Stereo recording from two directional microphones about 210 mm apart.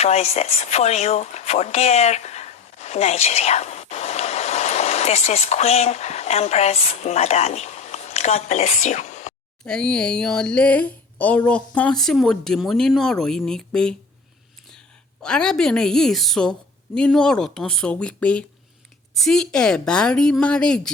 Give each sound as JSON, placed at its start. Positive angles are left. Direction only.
{"t": 0.0, "sound": "speech", "side_deg": 30}
{"t": 9.6, "sound": "speech", "side_deg": 5}
{"t": 15.2, "sound": "speech", "side_deg": 5}